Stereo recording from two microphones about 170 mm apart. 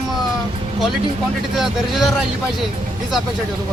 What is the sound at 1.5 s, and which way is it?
Speech, centre (ahead or behind).